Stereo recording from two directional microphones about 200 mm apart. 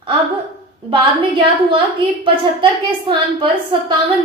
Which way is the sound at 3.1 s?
25° right (ahead or behind).